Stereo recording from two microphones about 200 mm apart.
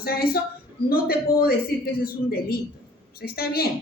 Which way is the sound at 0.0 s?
50° left (ahead or behind).